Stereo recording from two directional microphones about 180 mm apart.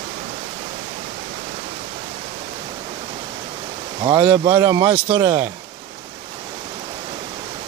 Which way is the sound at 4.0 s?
25° right (ahead or behind).